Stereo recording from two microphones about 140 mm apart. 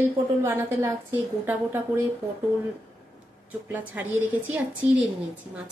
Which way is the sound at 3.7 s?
15° right (ahead or behind).